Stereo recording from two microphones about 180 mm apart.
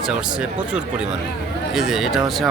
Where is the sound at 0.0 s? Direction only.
5° right (ahead or behind).